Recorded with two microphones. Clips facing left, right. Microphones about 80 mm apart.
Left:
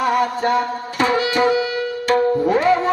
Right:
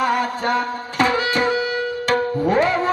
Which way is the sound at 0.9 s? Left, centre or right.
Left.